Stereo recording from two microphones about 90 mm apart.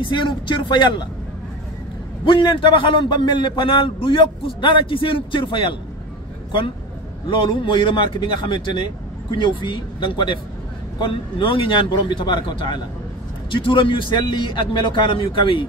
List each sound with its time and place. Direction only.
0.0 s a man's voice: 65° left (ahead or behind)
2.2 s a man's voice: 60° left (ahead or behind)
7.2 s a man's voice: 65° left (ahead or behind)
11.0 s a man's voice: 75° left (ahead or behind)
13.5 s a man's voice: 75° left (ahead or behind)